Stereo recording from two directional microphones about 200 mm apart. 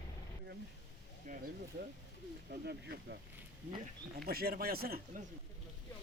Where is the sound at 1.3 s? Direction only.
40° right (ahead or behind).